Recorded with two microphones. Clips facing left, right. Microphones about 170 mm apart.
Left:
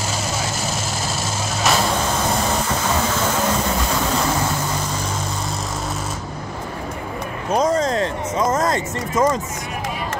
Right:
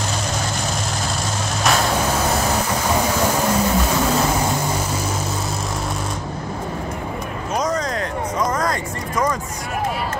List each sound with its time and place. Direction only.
1.6 s vehicle: centre (ahead or behind)
7.5 s music: 25° left (ahead or behind)